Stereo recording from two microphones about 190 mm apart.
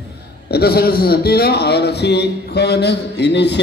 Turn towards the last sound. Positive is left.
turn(degrees=65)  # may be behind; listen again after turning